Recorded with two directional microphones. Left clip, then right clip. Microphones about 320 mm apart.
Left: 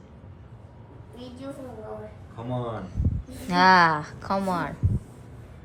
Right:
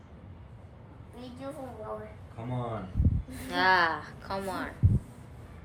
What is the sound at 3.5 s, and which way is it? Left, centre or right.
A woman's voice, left.